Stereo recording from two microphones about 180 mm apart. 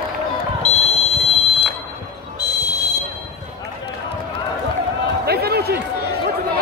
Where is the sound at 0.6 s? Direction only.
35° left (ahead or behind).